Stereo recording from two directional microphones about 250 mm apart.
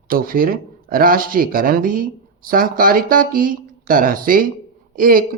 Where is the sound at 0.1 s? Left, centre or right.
Right.